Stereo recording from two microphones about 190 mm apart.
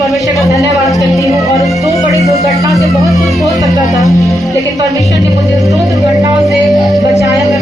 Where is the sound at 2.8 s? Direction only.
15° right (ahead or behind).